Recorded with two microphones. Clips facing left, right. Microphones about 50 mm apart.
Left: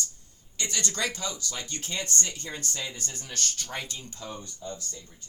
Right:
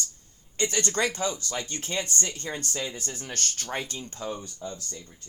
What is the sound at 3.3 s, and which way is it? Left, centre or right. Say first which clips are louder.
Speech: right 2 dB; right.